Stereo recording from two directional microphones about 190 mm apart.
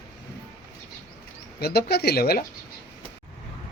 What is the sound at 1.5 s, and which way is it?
Speech, 55° left (ahead or behind).